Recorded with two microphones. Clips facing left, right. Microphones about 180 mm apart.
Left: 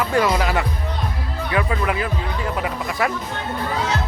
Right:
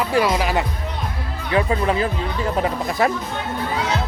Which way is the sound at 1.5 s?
30° right (ahead or behind).